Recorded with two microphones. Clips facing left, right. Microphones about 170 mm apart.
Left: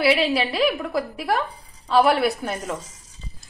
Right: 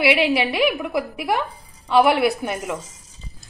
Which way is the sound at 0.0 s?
20° right (ahead or behind).